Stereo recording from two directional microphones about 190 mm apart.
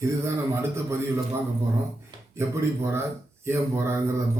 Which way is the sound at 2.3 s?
15° right (ahead or behind).